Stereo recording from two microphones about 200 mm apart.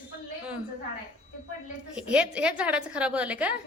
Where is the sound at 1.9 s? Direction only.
5° right (ahead or behind).